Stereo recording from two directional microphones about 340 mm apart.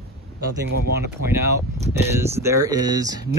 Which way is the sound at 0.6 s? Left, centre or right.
Right.